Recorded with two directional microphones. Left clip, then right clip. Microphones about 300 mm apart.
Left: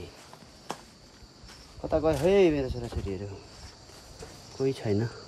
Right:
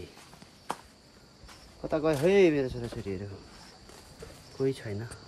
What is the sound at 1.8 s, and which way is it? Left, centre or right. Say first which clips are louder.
Speech: left 1 dB; centre.